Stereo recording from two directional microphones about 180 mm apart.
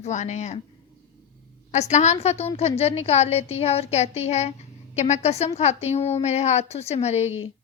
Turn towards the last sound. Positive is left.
turn(degrees=35)  # may be behind; listen again after turning